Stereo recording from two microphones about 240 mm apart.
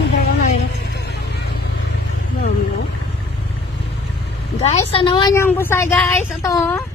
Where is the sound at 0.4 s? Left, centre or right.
Left.